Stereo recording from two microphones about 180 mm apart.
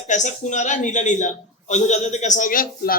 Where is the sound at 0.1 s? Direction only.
45° left (ahead or behind).